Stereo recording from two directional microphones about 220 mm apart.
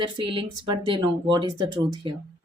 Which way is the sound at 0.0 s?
20° right (ahead or behind).